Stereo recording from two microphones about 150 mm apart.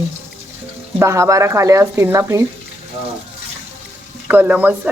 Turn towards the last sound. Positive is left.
turn(degrees=-10)  # may be behind; listen again after turning